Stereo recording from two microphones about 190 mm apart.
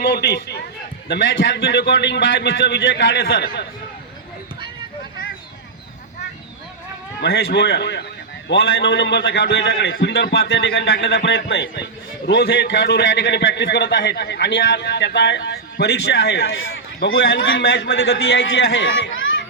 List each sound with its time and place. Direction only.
0.0 s a man's voice: 60° left (ahead or behind)
7.2 s a man's voice: 60° left (ahead or behind); by 19.4 s 90° left